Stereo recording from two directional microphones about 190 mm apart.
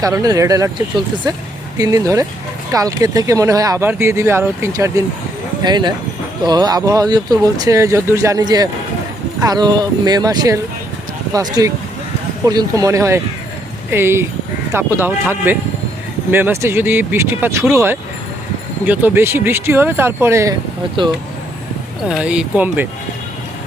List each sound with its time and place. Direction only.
0.0 s speech: 20° right (ahead or behind)
21.0 s speech: 25° right (ahead or behind)
22.1 s speech: 5° right (ahead or behind)